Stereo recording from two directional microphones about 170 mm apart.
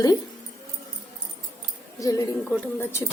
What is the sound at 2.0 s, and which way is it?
A woman's voice, 20° left (ahead or behind).